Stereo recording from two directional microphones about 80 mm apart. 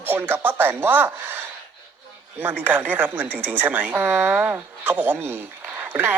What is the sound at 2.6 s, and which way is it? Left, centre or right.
Speech, right.